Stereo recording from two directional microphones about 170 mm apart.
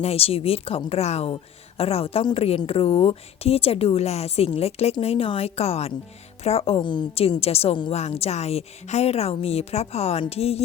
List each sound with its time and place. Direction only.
0.0 s a woman's voice: 35° left (ahead or behind)